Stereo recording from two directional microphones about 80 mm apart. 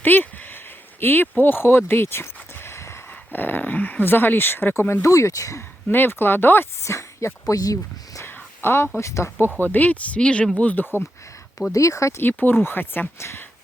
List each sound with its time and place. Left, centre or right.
0.0 s a sound: left
3.3 s speech: left
5.0 s speech: left
5.9 s speech: left
6.8 s speech: left
8.2 s a sound: left
9.0 s speech: left
9.6 s speech: left
11.7 s speech: left
12.2 s speech: left